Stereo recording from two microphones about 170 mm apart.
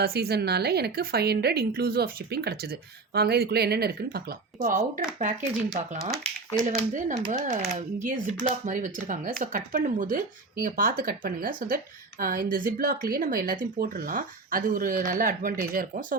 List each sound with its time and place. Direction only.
0.0 s a woman's voice: 70° right (ahead or behind); by 5.5 s 50° right (ahead or behind)
6.7 s speech: 45° right (ahead or behind)